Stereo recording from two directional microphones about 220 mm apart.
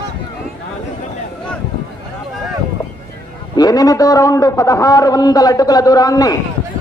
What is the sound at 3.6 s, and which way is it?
A man's voice, 15° left (ahead or behind).